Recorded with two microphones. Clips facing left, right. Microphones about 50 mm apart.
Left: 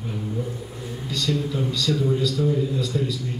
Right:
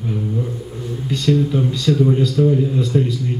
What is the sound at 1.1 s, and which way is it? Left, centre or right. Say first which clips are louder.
A man's voice: right 8 dB; right.